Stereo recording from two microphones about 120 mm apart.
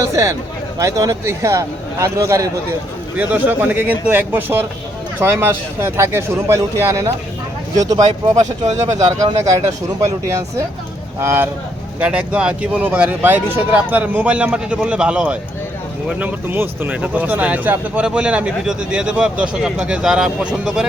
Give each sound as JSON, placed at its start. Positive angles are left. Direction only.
{"t": 0.0, "sound": "a man's voice", "side_deg": -25}
{"t": 3.2, "sound": "a man's voice", "side_deg": -15}
{"t": 8.7, "sound": "speech", "side_deg": -70}
{"t": 10.0, "sound": "a man's voice", "side_deg": -25}